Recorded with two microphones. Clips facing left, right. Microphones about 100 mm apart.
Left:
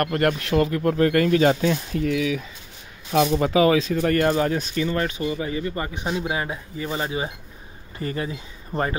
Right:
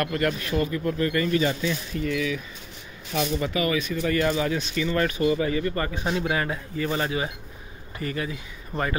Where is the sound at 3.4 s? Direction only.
90° left.